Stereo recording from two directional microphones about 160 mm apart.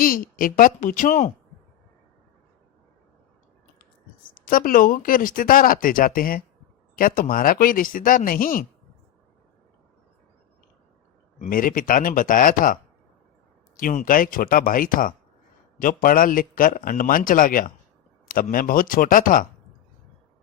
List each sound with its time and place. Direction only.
0.0 s speech: 60° left (ahead or behind)
4.4 s speech: 60° left (ahead or behind)
11.3 s speech: 60° left (ahead or behind)